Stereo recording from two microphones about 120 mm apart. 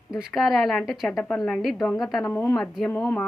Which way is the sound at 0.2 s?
Centre (ahead or behind).